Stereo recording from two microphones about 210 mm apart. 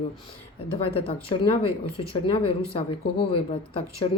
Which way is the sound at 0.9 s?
25° left (ahead or behind).